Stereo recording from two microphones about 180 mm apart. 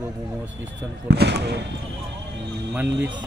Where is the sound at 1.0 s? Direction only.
70° right (ahead or behind).